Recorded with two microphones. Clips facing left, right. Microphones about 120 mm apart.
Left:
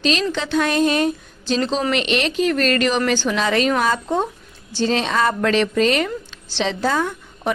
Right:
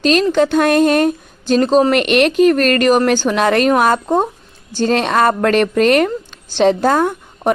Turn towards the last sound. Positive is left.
turn(degrees=-50)  # may be behind; listen again after turning